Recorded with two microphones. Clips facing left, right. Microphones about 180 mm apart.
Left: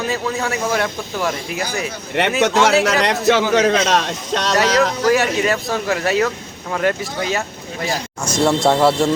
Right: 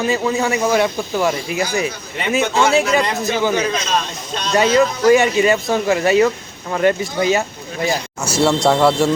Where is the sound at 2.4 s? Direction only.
80° left.